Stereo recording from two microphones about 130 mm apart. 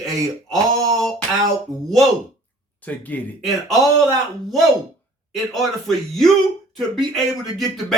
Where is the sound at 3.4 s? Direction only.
Centre (ahead or behind).